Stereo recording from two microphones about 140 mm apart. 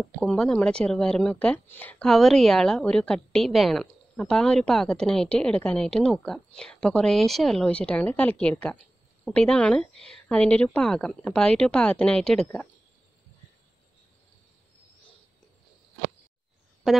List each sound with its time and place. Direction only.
0.2 s speech: 5° left (ahead or behind)
16.8 s speech: centre (ahead or behind)